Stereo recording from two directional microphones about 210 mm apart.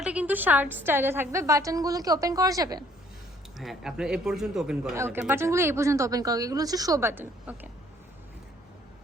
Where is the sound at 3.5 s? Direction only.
Centre (ahead or behind).